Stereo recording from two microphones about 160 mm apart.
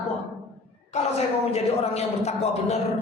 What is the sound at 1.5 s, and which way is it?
A man's voice, 40° left (ahead or behind).